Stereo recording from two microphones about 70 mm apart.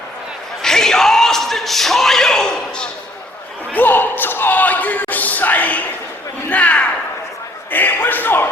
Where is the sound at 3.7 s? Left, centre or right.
Left.